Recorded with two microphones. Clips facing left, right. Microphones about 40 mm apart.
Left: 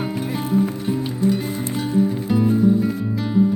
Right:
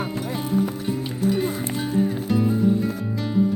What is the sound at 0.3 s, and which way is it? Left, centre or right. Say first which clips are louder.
Music: left 3 dB; centre.